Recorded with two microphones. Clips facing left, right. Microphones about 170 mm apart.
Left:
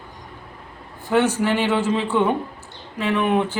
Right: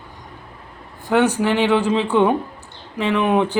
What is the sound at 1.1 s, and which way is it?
Speech, 15° right (ahead or behind).